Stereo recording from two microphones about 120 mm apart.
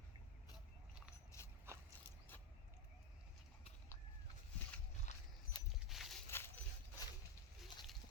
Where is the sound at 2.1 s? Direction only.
15° left (ahead or behind).